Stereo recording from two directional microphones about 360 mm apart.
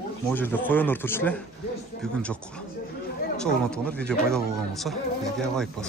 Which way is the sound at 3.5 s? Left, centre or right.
Centre.